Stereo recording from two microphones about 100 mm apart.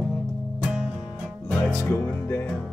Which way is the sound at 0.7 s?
5° right (ahead or behind).